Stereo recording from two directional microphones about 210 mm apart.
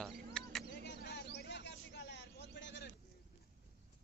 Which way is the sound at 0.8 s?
55° left (ahead or behind).